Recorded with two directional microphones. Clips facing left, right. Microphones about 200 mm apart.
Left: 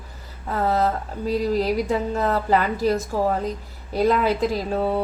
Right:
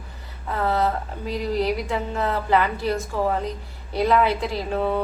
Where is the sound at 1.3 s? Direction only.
40° left (ahead or behind).